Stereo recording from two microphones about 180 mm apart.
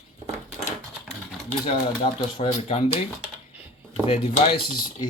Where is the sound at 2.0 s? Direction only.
35° left (ahead or behind).